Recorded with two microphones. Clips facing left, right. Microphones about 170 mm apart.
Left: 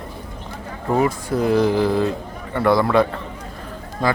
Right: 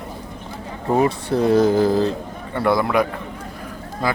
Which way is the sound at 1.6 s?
45° right (ahead or behind).